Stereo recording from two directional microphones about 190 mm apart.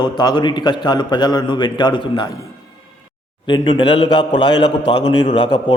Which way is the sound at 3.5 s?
25° left (ahead or behind).